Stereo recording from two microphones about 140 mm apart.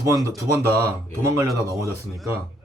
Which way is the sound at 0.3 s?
25° right (ahead or behind).